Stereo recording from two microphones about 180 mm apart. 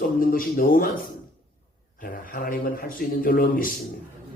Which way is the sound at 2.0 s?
50° left (ahead or behind).